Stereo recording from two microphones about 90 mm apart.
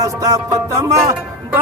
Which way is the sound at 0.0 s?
40° right (ahead or behind).